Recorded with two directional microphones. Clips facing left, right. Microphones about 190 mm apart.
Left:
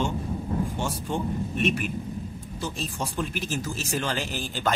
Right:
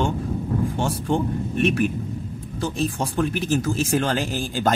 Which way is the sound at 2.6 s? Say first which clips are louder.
Right 7 dB; 60° right (ahead or behind).